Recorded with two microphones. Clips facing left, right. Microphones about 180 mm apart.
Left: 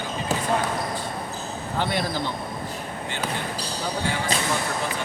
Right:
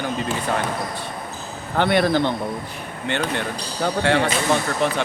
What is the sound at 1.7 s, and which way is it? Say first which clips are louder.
Speech: right 8 dB; 65° right (ahead or behind).